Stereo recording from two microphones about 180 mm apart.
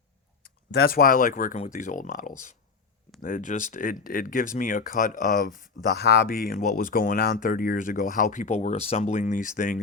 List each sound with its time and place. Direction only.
0.8 s speech: 55° left (ahead or behind)